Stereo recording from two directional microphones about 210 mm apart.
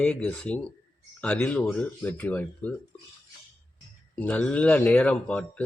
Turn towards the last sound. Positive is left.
turn(degrees=5)  # may be behind; listen again after turning